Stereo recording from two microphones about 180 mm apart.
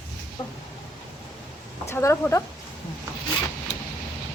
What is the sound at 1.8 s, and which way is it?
Speech, 15° left (ahead or behind).